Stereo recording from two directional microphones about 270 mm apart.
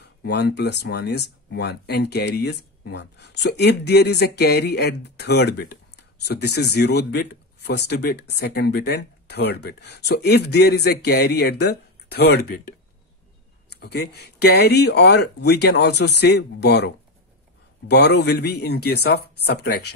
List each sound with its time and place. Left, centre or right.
0.2 s speech: left
13.7 s speech: left